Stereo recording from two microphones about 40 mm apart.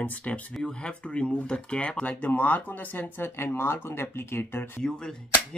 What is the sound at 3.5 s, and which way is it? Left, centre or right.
Speech, left.